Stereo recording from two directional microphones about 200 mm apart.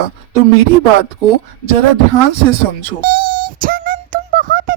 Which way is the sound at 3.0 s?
50° right (ahead or behind).